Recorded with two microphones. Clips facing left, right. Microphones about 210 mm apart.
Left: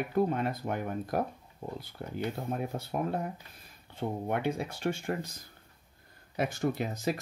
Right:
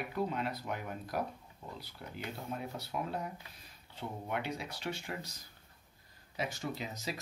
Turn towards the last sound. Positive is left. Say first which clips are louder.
# left 9 dB
turn(degrees=55)  # may be behind; listen again after turning